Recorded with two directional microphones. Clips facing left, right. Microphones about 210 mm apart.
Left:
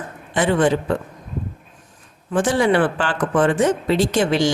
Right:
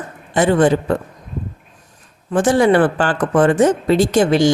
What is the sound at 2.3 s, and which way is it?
A woman's voice, 45° right (ahead or behind).